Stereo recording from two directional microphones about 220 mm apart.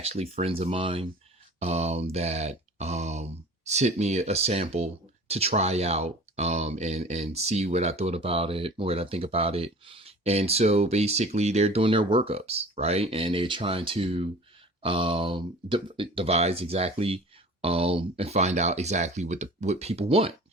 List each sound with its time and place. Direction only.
0.0 s speech: 30° right (ahead or behind)